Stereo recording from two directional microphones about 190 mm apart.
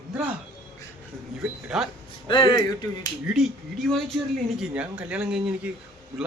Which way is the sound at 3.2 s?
Centre (ahead or behind).